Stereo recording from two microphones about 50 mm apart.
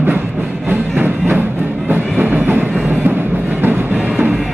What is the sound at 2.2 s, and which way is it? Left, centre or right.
Train, right.